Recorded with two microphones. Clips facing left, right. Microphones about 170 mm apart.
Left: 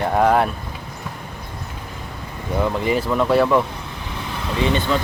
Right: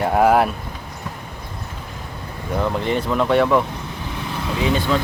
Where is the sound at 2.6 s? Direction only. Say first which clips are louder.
Left 1 dB; 5° left (ahead or behind).